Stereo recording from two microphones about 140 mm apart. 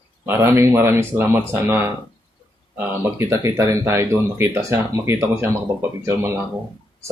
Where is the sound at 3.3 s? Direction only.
20° right (ahead or behind).